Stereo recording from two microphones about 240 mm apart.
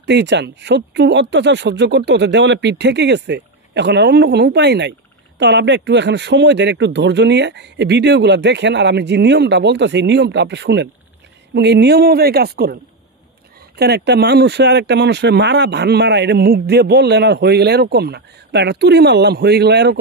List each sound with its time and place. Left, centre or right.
0.0 s speech: right
13.7 s speech: right